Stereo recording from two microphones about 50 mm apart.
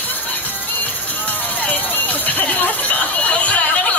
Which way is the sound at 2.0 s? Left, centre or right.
Left.